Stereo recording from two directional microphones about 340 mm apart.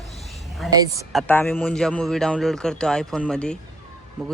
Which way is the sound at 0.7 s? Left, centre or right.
Centre.